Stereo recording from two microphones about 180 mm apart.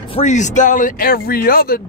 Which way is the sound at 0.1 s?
40° left (ahead or behind).